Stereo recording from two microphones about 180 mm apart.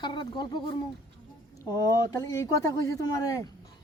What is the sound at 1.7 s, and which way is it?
Speech, 20° left (ahead or behind).